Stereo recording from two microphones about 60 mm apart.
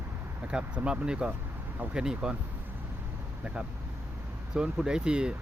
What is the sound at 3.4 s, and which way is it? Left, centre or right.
Speech, centre.